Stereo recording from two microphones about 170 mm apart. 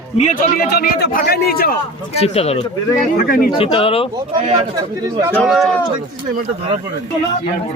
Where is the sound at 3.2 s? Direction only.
55° left (ahead or behind).